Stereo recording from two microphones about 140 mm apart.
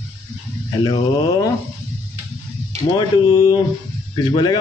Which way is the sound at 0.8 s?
35° left (ahead or behind).